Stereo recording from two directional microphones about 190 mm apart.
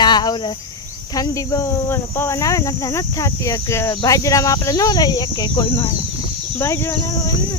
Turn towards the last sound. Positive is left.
turn(degrees=15)  # may be behind; listen again after turning